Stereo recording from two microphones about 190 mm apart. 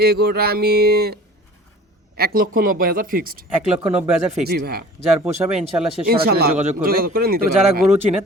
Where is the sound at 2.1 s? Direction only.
50° right (ahead or behind).